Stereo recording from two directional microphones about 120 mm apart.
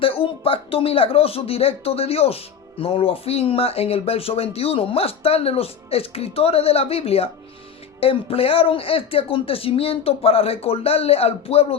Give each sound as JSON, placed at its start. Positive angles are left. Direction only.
{"t": 0.0, "sound": "speech", "side_deg": 50}